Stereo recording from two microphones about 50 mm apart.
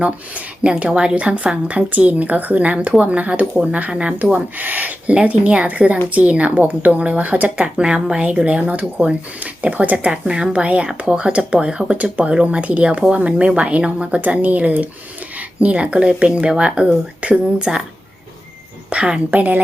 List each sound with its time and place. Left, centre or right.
0.0 s speech: right
18.9 s speech: right
19.3 s speech: right